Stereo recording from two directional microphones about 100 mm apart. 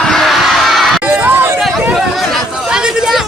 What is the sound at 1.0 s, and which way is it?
Crowd, 20° right (ahead or behind).